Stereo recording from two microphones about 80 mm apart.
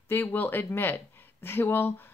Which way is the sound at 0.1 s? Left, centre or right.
Left.